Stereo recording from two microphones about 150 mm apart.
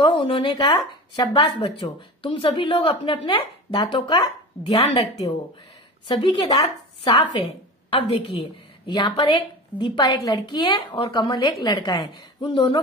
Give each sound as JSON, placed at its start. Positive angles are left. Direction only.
{"t": 0.0, "sound": "speech", "side_deg": 35}
{"t": 6.0, "sound": "speech", "side_deg": 35}